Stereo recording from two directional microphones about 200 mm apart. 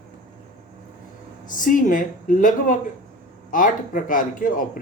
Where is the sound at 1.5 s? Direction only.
40° left (ahead or behind).